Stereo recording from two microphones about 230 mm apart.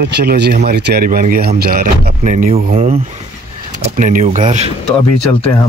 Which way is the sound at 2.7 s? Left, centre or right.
Right.